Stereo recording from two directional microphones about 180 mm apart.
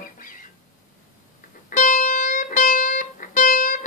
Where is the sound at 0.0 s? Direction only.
50° left (ahead or behind).